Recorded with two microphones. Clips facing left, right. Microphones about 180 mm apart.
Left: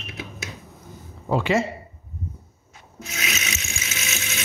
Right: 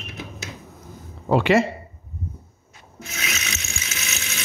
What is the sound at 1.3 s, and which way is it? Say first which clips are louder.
Speech: right 4 dB; 70° right (ahead or behind).